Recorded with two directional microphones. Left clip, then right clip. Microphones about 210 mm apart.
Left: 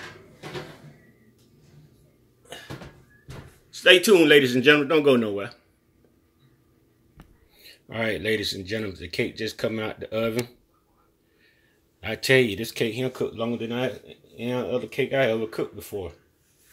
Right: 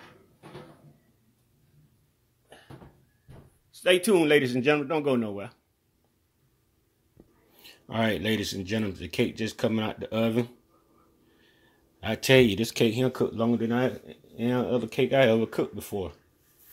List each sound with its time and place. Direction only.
3.8 s speech: 50° right (ahead or behind); by 5.6 s 35° right (ahead or behind)
7.5 s speech: 25° right (ahead or behind)
12.0 s speech: 30° right (ahead or behind); by 16.1 s 45° right (ahead or behind)